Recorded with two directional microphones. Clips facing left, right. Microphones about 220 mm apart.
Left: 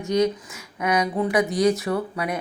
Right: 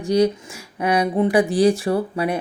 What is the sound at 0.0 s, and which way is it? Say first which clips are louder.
Speech: right 3 dB; 30° right (ahead or behind).